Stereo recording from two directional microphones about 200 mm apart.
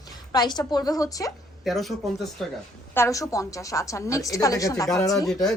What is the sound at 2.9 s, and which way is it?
A woman's voice, 15° left (ahead or behind).